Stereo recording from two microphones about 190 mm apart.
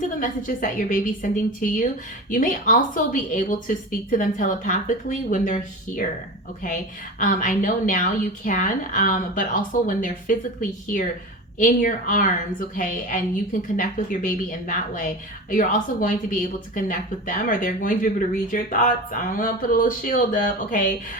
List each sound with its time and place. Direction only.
0.2 s speech: 45° left (ahead or behind)
7.2 s speech: 45° left (ahead or behind)